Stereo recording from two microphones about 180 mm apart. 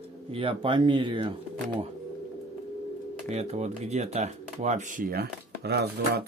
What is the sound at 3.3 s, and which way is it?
Speech, 35° right (ahead or behind).